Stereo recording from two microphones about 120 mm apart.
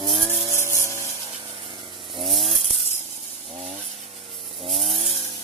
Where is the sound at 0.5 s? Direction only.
20° right (ahead or behind).